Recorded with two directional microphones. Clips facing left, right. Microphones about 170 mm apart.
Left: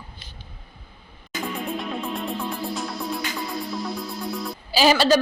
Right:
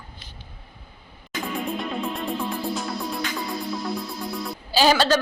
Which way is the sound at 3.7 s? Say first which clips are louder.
Right 1 dB; centre (ahead or behind).